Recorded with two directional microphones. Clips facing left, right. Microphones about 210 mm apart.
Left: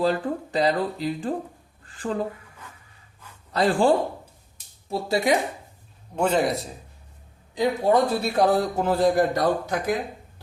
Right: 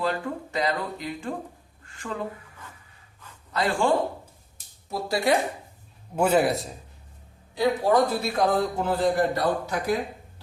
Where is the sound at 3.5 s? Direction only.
35° left (ahead or behind).